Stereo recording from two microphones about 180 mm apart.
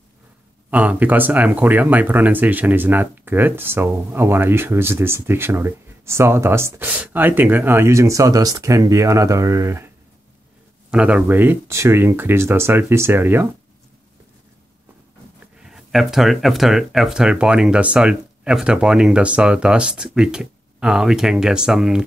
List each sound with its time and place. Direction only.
0.7 s speech: 10° right (ahead or behind)
10.9 s speech: 5° right (ahead or behind)
15.6 s speech: centre (ahead or behind)